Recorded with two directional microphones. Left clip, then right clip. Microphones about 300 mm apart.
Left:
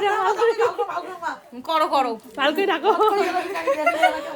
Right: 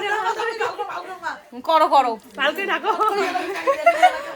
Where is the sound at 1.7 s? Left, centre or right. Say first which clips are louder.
Right 4 dB; centre.